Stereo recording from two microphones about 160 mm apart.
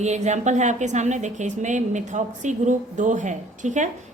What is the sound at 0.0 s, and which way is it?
A woman's voice, 45° right (ahead or behind).